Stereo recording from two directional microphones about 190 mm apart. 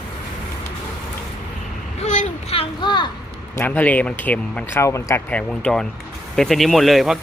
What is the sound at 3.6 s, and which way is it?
Speech, 10° left (ahead or behind).